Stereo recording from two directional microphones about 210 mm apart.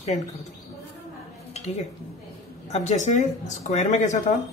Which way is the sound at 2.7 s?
30° left (ahead or behind).